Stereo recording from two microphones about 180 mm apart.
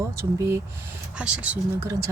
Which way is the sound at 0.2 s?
15° right (ahead or behind).